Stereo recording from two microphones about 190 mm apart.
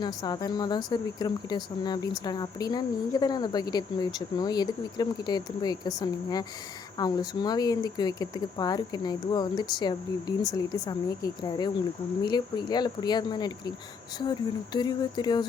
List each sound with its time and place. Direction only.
0.0 s speech: 20° left (ahead or behind)